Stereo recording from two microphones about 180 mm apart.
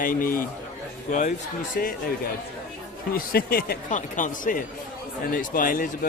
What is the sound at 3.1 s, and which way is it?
Speech, 55° left (ahead or behind).